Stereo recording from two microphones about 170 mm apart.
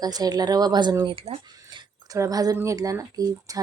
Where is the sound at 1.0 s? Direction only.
35° right (ahead or behind).